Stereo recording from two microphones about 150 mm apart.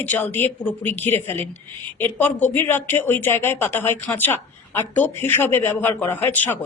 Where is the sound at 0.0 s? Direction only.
10° left (ahead or behind).